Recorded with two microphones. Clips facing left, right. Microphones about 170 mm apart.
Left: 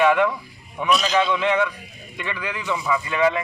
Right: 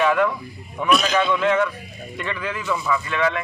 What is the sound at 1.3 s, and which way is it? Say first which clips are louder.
A man's voice: right 1 dB; 15° left (ahead or behind).